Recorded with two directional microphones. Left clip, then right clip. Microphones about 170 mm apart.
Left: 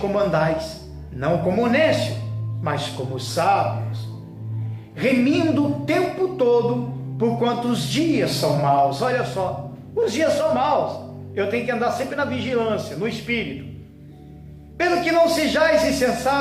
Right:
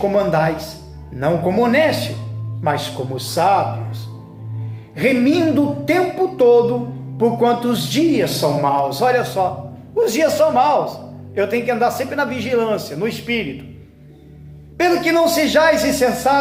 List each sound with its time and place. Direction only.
0.0 s a man's voice: 35° right (ahead or behind)
4.9 s a man's voice: 35° right (ahead or behind)
14.8 s a man's voice: 35° right (ahead or behind)